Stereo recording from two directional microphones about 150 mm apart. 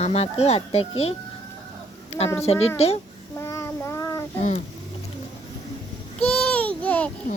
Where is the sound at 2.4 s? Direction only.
45° left (ahead or behind).